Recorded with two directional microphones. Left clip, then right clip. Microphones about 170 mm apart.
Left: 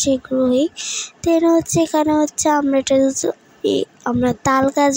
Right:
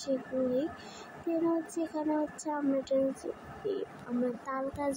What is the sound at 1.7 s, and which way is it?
Speech, 65° left (ahead or behind).